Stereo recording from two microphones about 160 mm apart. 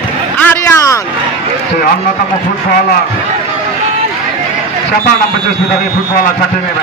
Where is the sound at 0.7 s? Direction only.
15° left (ahead or behind).